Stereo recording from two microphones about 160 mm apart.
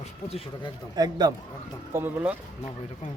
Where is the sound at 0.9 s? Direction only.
25° right (ahead or behind).